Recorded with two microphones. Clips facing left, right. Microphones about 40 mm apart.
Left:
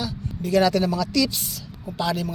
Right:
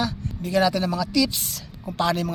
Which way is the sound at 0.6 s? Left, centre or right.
Centre.